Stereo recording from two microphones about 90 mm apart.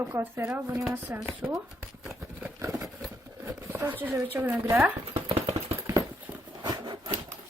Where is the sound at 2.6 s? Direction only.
35° right (ahead or behind).